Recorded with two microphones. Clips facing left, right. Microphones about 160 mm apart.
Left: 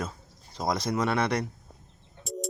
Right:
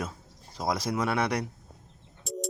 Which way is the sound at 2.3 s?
Centre (ahead or behind).